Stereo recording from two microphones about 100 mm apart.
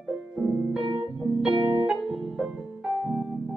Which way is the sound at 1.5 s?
65° right (ahead or behind).